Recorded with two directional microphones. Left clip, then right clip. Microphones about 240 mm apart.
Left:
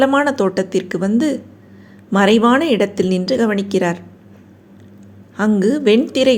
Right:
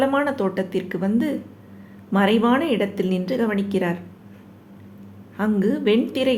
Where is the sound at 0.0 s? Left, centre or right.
Left.